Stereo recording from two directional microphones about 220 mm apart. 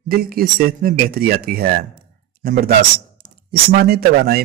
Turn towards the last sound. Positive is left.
turn(degrees=-45)  # may be behind; listen again after turning